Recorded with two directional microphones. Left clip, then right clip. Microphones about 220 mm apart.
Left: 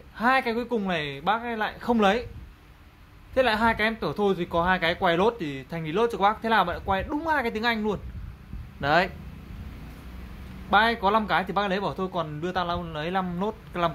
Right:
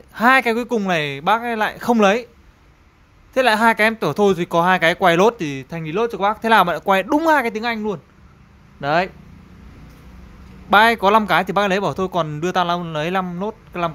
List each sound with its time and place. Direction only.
0.1 s speech: 30° right (ahead or behind)
3.3 s speech: 30° right (ahead or behind)
10.7 s speech: 30° right (ahead or behind)
13.3 s speech: 15° right (ahead or behind)